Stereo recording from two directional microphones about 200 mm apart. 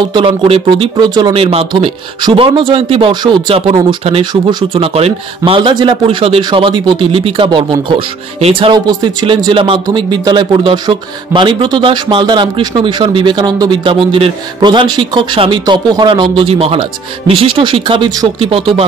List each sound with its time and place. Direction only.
0.1 s speech: 25° right (ahead or behind)